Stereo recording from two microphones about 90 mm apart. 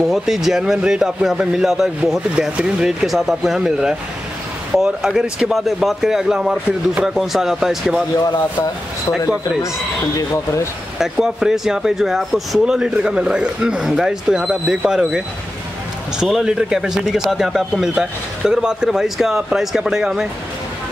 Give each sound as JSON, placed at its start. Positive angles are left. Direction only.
{"t": 0.1, "sound": "a man's voice", "side_deg": -5}
{"t": 10.1, "sound": "speech", "side_deg": 35}
{"t": 11.0, "sound": "a man's voice", "side_deg": -5}